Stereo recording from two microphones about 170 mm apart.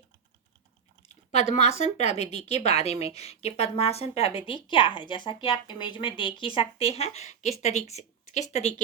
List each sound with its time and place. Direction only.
1.0 s chewing: 40° left (ahead or behind)
1.8 s a woman's voice: 40° left (ahead or behind)